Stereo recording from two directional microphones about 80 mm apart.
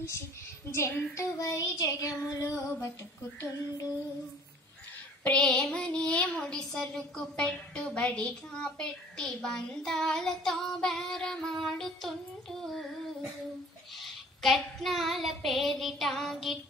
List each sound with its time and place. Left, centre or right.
0.7 s child singing: left
3.3 s female singing: left
5.3 s child singing: centre